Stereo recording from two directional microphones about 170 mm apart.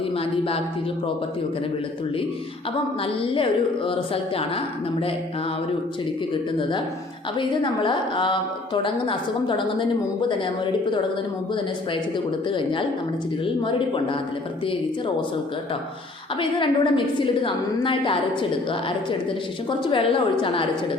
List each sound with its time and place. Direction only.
0.2 s a woman's voice: 35° left (ahead or behind)
3.0 s a woman's voice: 30° left (ahead or behind)
6.6 s a woman's voice: 30° left (ahead or behind)
16.4 s a woman's voice: 30° left (ahead or behind)